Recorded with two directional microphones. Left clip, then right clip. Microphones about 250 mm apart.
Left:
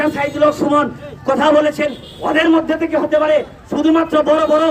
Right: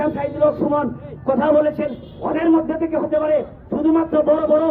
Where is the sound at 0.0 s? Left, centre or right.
Centre.